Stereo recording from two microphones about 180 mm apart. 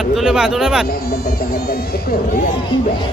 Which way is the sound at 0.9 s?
60° left (ahead or behind).